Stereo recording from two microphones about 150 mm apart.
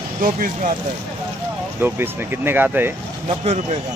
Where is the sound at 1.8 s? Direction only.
15° right (ahead or behind).